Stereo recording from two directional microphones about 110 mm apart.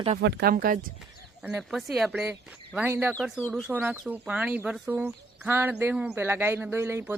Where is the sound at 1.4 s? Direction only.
5° right (ahead or behind).